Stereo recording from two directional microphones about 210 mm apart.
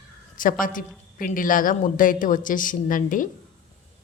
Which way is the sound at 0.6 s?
40° left (ahead or behind).